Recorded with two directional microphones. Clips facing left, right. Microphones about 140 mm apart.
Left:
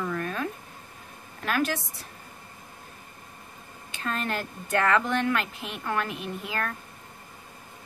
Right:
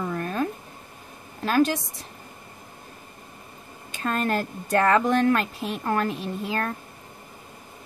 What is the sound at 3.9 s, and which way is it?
Speech, 40° right (ahead or behind).